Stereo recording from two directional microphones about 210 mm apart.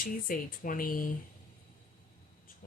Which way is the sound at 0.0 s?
40° left (ahead or behind).